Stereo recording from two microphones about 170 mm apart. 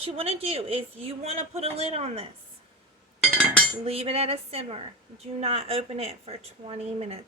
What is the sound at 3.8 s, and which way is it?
A woman's voice, 35° right (ahead or behind).